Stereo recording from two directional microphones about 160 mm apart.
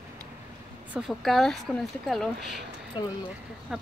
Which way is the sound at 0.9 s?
Centre (ahead or behind).